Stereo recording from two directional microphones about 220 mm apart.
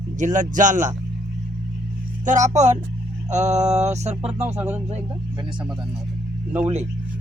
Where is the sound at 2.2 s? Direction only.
35° right (ahead or behind).